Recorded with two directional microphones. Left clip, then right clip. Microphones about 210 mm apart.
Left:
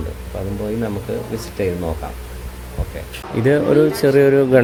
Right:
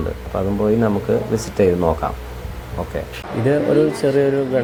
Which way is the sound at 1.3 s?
20° right (ahead or behind).